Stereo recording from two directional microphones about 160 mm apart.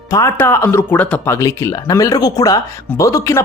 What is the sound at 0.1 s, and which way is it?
Speech, 20° left (ahead or behind).